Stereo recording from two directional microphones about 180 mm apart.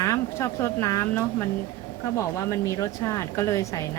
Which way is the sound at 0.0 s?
15° left (ahead or behind).